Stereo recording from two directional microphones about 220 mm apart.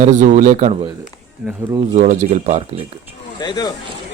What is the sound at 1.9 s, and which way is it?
Speech, 30° right (ahead or behind).